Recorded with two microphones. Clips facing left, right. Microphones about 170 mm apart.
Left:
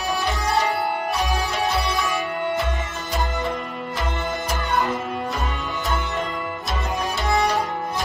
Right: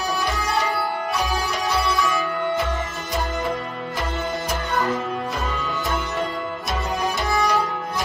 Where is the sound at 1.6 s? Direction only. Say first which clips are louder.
Right 3 dB; 20° left (ahead or behind).